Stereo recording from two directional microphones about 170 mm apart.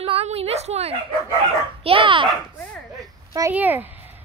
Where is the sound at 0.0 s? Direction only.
35° right (ahead or behind).